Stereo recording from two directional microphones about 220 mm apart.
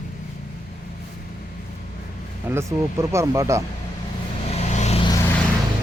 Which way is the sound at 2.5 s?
15° right (ahead or behind).